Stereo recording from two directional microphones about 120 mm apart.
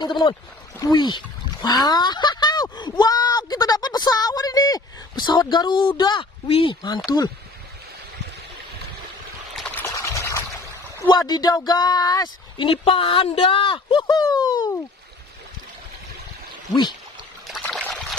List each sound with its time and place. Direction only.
0.0 s speech: 40° left (ahead or behind)
9.8 s pour: 25° left (ahead or behind)
11.0 s speech: 35° left (ahead or behind)
12.6 s speech: 50° left (ahead or behind)
17.6 s a sound: 5° left (ahead or behind)